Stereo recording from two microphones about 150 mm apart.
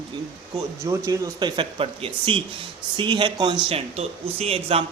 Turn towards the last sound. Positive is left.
turn(degrees=-40)  # may be behind; listen again after turning